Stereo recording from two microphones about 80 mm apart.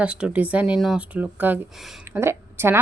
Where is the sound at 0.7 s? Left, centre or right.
Centre.